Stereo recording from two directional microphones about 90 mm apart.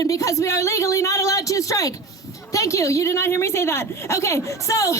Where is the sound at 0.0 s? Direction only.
40° left (ahead or behind).